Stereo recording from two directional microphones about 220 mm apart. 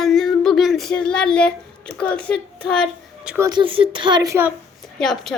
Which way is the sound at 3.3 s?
15° right (ahead or behind).